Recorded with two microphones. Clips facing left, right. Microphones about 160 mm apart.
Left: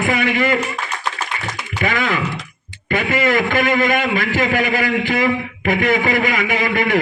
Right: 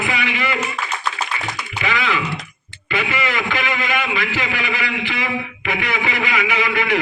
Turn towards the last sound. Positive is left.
turn(degrees=45)  # may be behind; listen again after turning